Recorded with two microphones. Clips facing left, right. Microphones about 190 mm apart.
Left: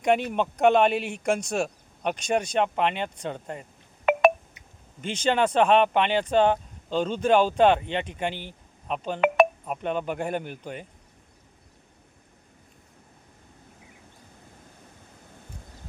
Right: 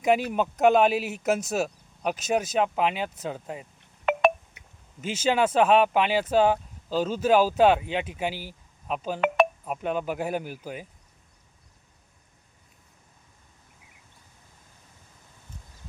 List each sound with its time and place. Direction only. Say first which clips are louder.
0.0 s speech: even; 5° right (ahead or behind)
4.6 s a sound: left 1 dB; 65° right (ahead or behind)
4.9 s speech: even; 5° right (ahead or behind)